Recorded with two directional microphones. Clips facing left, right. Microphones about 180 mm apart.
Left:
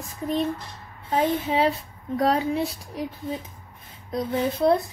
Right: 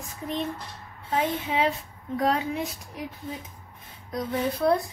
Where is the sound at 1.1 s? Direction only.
35° left (ahead or behind).